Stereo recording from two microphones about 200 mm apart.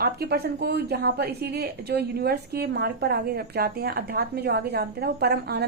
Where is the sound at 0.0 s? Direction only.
50° right (ahead or behind).